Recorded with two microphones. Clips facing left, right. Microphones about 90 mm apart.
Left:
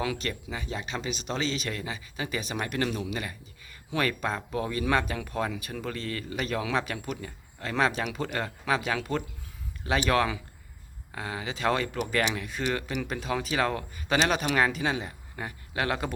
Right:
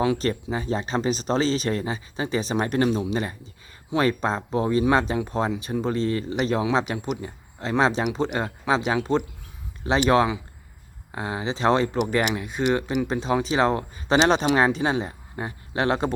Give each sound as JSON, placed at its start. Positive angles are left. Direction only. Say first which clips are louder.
{"t": 0.0, "sound": "speech", "louder": "right 8 dB", "side_deg": -30}